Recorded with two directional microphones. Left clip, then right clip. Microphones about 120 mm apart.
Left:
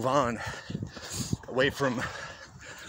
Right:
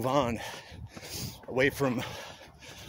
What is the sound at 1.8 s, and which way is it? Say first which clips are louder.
Speech: left 1 dB; 40° right (ahead or behind).